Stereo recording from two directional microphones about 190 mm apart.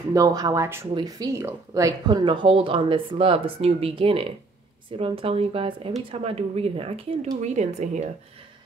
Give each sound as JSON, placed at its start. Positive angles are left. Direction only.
{"t": 0.1, "sound": "speech", "side_deg": -20}